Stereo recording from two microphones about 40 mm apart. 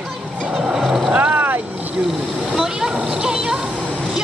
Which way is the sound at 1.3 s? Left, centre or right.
Right.